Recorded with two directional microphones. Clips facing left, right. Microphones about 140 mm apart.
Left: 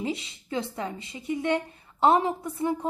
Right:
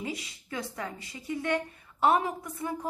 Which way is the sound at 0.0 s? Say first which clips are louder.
Left 5 dB; 25° left (ahead or behind).